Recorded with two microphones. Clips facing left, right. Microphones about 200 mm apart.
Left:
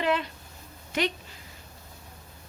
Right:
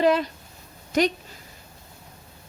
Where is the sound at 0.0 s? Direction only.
40° right (ahead or behind).